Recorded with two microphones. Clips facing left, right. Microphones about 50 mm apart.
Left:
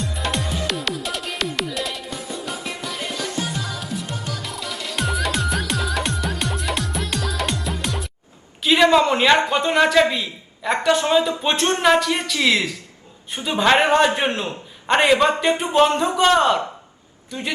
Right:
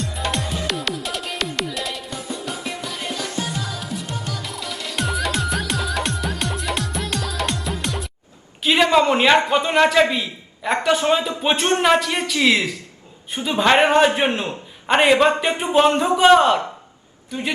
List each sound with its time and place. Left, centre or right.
0.0 s music: centre
8.6 s a sound: centre
9.0 s speech: centre
13.4 s a man's voice: centre